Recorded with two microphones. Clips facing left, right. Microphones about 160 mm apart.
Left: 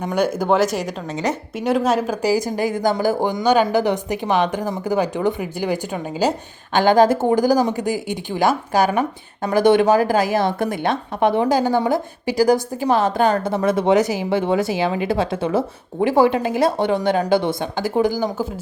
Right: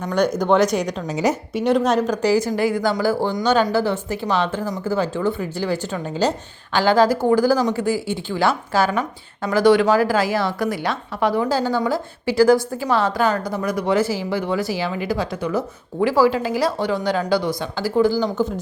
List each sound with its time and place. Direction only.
0.0 s speech: 10° left (ahead or behind); by 1.4 s 10° right (ahead or behind)
1.5 s speech: 5° left (ahead or behind)